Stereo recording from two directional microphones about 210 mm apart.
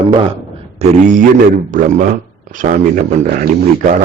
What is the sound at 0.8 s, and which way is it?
Music, 35° right (ahead or behind).